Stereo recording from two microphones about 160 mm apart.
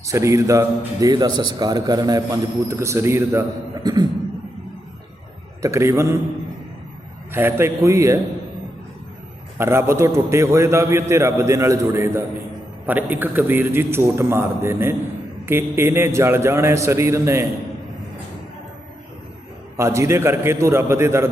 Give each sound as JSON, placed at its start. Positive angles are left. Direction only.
{"t": 0.0, "sound": "a man's voice", "side_deg": -20}
{"t": 5.6, "sound": "a man's voice", "side_deg": -15}
{"t": 7.3, "sound": "a man's voice", "side_deg": -15}
{"t": 9.6, "sound": "a man's voice", "side_deg": -15}
{"t": 19.7, "sound": "a man's voice", "side_deg": -20}